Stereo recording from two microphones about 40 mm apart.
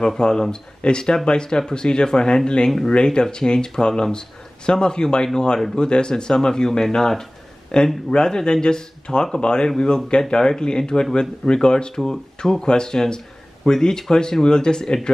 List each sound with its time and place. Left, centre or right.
0.2 s speech: centre